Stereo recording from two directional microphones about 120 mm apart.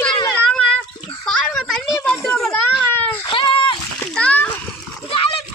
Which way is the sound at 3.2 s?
45° left (ahead or behind).